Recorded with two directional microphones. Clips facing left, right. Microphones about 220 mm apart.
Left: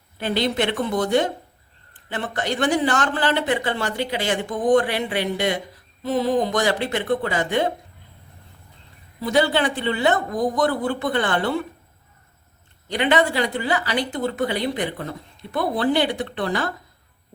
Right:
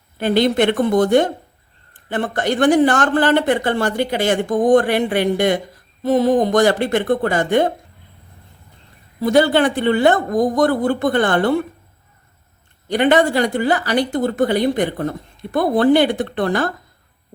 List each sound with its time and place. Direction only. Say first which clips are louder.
0.2 s speech: right 7 dB; 50° right (ahead or behind)
9.2 s speech: right 6 dB; 45° right (ahead or behind)
12.9 s speech: right 5 dB; 50° right (ahead or behind)